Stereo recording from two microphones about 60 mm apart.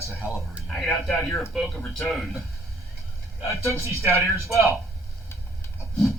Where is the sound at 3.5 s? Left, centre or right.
Right.